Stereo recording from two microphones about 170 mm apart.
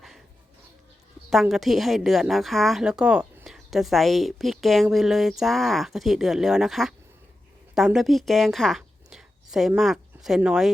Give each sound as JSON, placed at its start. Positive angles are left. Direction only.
{"t": 1.3, "sound": "a woman's voice", "side_deg": 0}